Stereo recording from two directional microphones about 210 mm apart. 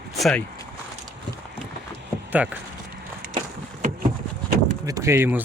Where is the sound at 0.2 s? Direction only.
Centre (ahead or behind).